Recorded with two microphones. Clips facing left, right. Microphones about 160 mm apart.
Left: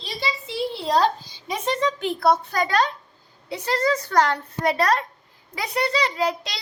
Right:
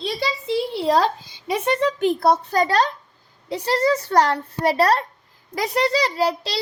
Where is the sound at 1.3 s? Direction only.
60° right (ahead or behind).